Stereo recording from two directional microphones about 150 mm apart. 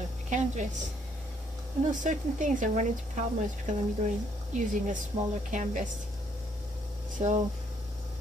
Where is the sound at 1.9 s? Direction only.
60° right (ahead or behind).